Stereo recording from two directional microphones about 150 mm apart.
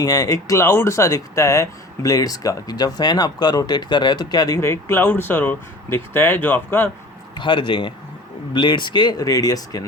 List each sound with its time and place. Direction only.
0.0 s speech: 25° left (ahead or behind)
7.3 s speech: 30° left (ahead or behind)